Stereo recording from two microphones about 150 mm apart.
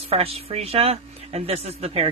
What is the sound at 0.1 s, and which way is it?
Speech, 40° right (ahead or behind).